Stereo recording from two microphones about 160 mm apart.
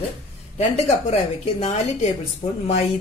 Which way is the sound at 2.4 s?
65° left (ahead or behind).